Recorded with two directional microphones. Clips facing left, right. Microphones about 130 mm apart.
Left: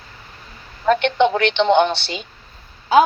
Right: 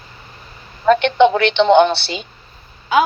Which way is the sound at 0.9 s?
90° right.